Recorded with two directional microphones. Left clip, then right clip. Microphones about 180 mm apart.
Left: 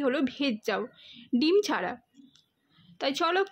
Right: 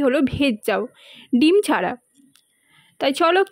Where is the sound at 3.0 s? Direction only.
35° right (ahead or behind).